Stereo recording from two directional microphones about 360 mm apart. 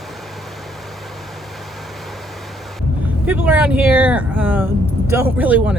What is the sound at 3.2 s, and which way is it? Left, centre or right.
Speech, centre.